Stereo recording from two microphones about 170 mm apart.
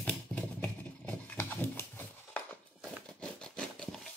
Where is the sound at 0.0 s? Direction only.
10° left (ahead or behind).